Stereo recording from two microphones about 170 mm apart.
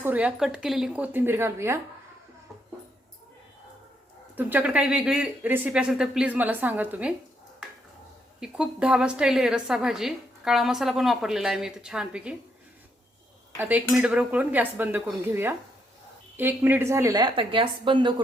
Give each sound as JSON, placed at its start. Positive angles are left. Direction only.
{"t": 0.0, "sound": "speech", "side_deg": -10}
{"t": 4.4, "sound": "speech", "side_deg": -10}
{"t": 8.4, "sound": "a woman's voice", "side_deg": -5}
{"t": 13.6, "sound": "a woman's voice", "side_deg": -10}